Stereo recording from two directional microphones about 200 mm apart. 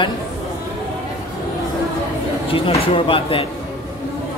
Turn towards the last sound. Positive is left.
turn(degrees=25)  # may be behind; listen again after turning